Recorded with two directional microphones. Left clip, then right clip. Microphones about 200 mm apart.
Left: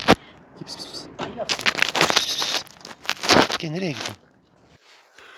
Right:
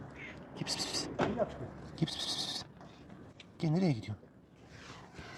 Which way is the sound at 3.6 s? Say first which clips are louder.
Left 6 dB; 40° right (ahead or behind).